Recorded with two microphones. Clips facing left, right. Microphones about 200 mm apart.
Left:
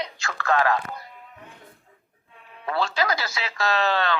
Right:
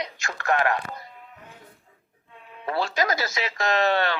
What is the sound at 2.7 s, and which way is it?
Speech, 20° right (ahead or behind).